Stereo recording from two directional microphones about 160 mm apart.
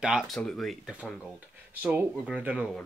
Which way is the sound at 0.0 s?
5° right (ahead or behind).